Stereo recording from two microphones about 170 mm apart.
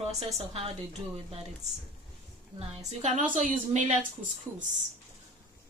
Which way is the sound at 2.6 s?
45° right (ahead or behind).